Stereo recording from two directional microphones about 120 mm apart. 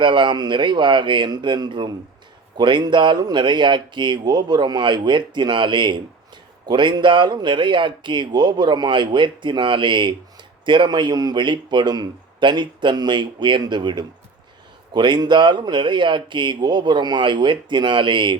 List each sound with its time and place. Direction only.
0.0 s speech: 40° right (ahead or behind)